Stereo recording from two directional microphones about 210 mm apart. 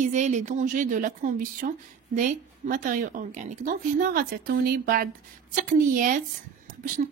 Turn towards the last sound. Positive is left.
turn(degrees=-40)  # may be behind; listen again after turning